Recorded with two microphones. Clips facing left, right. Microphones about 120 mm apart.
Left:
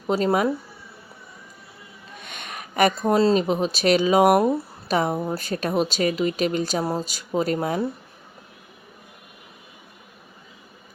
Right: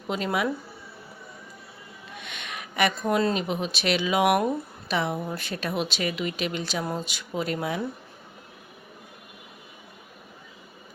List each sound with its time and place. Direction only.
0.1 s speech: 35° left (ahead or behind)
2.2 s speech: 45° left (ahead or behind)